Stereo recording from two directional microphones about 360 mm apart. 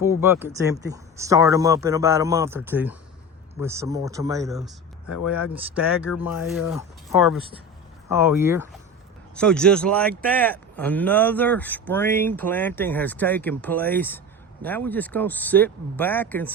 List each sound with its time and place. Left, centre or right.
0.0 s speech: centre
5.0 s speech: left
5.3 s speech: centre